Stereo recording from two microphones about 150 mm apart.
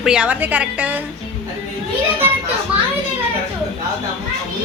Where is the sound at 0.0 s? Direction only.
5° right (ahead or behind).